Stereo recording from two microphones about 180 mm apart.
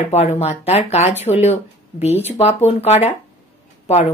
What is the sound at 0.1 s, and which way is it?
Speech, 35° left (ahead or behind).